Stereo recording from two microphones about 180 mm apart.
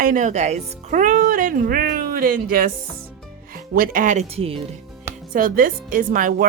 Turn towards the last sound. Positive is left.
turn(degrees=-50)  # may be behind; listen again after turning